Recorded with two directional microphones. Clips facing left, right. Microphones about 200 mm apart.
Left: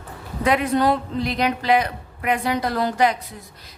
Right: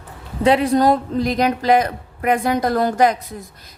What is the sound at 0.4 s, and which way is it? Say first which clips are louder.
A woman's voice: right 4 dB; 30° right (ahead or behind).